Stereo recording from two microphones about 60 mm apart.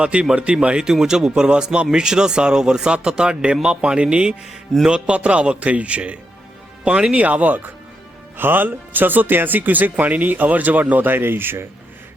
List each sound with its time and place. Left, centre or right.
0.0 s a man's voice: centre; by 11.7 s right